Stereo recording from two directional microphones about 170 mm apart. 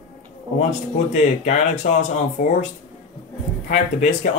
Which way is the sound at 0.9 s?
45° left (ahead or behind).